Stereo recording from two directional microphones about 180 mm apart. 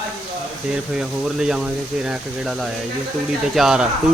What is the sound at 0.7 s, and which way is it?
Speech, 5° right (ahead or behind).